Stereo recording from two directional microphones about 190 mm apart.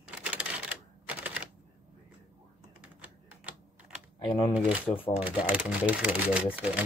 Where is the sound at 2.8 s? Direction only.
5° right (ahead or behind).